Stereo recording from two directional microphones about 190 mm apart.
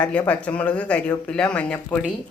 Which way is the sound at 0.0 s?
5° left (ahead or behind).